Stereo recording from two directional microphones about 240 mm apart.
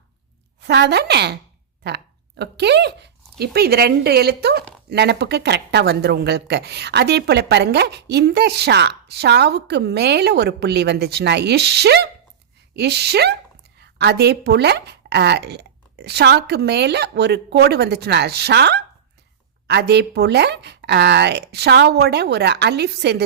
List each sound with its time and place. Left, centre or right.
0.6 s speech: right